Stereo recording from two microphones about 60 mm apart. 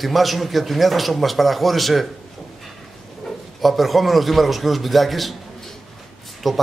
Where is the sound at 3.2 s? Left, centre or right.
Centre.